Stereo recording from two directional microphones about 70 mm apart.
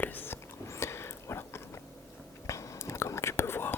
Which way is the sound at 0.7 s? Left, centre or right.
Left.